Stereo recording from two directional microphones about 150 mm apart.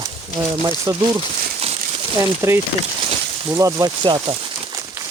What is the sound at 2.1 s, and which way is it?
Speech, 15° right (ahead or behind).